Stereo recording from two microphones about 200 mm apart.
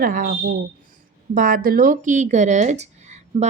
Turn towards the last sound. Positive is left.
turn(degrees=-35)  # may be behind; listen again after turning